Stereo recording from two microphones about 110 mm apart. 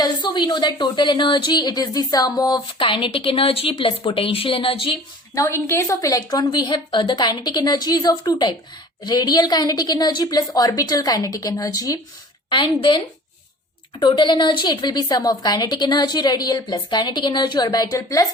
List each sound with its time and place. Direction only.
0.0 s a woman's voice: 45° left (ahead or behind)
5.3 s a woman's voice: 30° left (ahead or behind)
12.5 s a woman's voice: 45° left (ahead or behind)
14.0 s a woman's voice: 45° left (ahead or behind)